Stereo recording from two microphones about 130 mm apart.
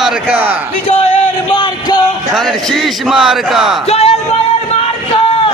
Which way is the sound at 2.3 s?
Centre (ahead or behind).